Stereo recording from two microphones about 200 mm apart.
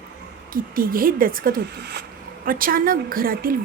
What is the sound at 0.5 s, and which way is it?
Speech, 45° right (ahead or behind).